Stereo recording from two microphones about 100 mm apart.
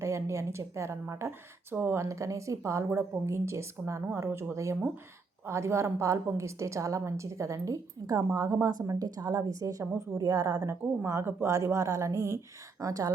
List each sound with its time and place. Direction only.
0.0 s a woman's voice: 30° right (ahead or behind)